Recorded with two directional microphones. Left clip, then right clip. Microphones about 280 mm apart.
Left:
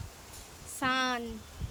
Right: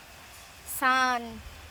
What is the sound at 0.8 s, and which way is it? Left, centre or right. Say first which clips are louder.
Speech: right 6 dB; centre.